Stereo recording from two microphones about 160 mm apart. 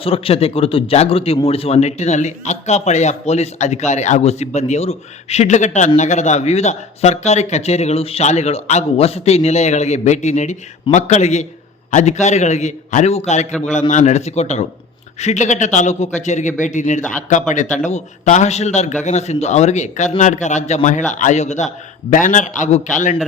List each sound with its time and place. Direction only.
0.0 s a man's voice: 35° left (ahead or behind)